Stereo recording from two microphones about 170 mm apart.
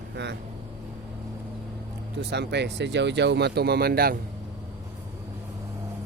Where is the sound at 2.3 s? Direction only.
85° right; by 4.2 s 60° right (ahead or behind).